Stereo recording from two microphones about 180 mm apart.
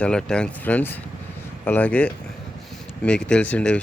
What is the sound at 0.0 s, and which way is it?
Speech, 5° left (ahead or behind).